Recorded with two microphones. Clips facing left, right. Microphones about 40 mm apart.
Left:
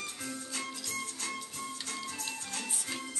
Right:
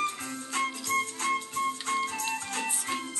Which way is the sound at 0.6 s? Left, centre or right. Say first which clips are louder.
Right 13 dB; right.